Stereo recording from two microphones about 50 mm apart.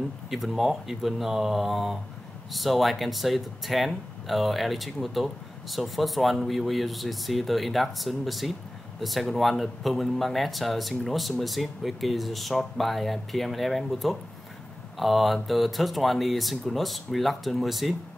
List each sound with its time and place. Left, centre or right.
0.3 s speech: centre